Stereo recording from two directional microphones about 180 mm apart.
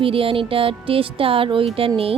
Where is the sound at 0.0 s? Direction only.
30° right (ahead or behind).